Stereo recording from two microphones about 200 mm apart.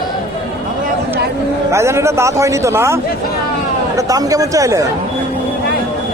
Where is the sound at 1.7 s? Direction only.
15° right (ahead or behind).